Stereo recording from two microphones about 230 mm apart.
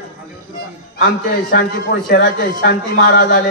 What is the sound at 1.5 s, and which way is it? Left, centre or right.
A man's voice, left.